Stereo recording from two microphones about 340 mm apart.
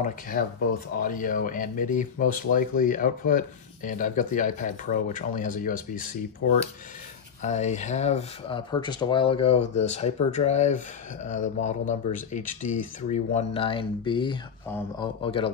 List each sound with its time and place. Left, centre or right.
0.0 s speech: left